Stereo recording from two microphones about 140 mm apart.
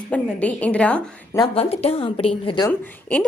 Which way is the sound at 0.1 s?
10° left (ahead or behind).